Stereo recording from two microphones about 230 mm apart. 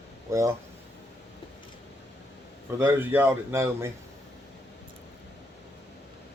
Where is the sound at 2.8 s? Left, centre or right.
Centre.